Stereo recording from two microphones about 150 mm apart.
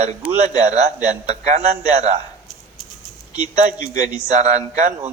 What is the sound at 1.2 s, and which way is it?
Speech, 50° right (ahead or behind).